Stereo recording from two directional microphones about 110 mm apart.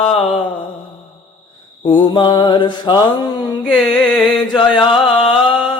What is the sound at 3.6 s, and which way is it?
Chant, 5° left (ahead or behind).